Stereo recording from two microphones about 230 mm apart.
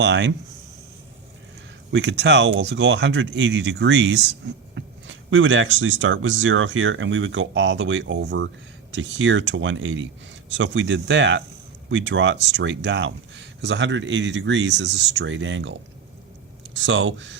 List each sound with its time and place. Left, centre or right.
0.0 s speech: right
1.9 s speech: right
16.7 s speech: right